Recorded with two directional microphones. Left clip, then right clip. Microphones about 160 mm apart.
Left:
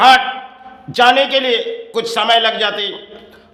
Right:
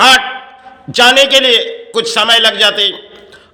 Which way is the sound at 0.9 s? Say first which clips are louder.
Right 4 dB; 15° right (ahead or behind).